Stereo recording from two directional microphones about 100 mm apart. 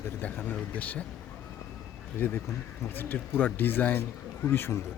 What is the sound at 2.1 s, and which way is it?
Speech, 20° left (ahead or behind).